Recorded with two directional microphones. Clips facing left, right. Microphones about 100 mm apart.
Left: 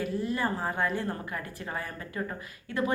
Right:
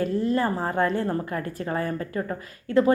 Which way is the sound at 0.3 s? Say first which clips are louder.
Right 6 dB; 40° right (ahead or behind).